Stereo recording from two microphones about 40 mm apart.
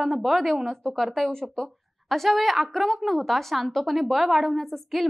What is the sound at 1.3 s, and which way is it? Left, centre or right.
Speech, centre.